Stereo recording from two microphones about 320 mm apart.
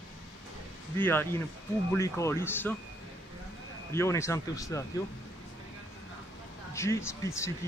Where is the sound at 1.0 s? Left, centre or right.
Centre.